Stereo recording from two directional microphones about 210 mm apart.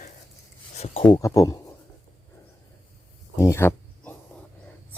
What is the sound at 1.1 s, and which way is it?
Speech, 15° left (ahead or behind).